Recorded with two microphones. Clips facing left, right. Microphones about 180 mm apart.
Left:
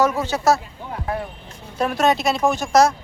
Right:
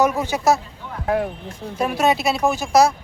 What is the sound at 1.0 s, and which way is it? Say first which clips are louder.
Speech: right 7 dB; 90° right.